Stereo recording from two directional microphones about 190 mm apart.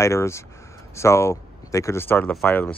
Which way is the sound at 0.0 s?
15° left (ahead or behind).